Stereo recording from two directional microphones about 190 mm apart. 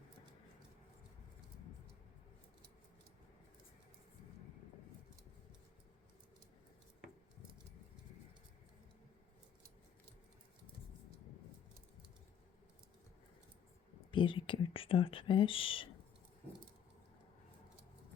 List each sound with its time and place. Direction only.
14.1 s speech: 25° left (ahead or behind)